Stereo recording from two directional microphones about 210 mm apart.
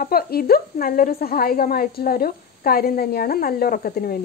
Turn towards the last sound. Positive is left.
turn(degrees=45)  # may be behind; listen again after turning